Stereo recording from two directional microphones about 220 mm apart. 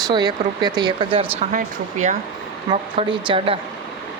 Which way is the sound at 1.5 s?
35° right (ahead or behind).